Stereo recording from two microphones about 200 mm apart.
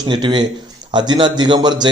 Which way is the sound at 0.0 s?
20° right (ahead or behind).